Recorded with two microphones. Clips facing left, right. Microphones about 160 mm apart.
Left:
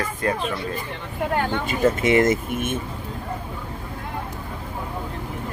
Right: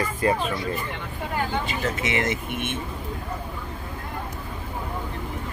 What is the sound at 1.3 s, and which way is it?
Speech, 50° left (ahead or behind).